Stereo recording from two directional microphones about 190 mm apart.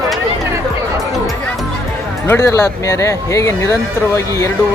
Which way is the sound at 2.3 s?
15° left (ahead or behind).